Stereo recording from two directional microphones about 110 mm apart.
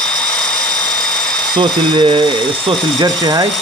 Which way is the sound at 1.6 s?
45° right (ahead or behind).